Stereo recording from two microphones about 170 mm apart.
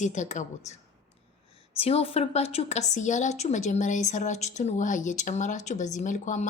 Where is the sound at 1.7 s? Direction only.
35° left (ahead or behind).